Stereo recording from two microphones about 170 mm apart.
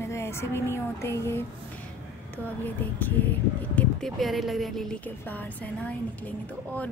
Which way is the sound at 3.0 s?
10° left (ahead or behind).